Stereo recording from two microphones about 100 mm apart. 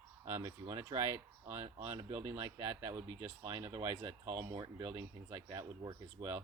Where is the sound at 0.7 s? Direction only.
40° right (ahead or behind).